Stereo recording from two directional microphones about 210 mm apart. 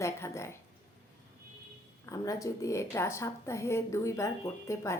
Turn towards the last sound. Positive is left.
turn(degrees=15)  # may be behind; listen again after turning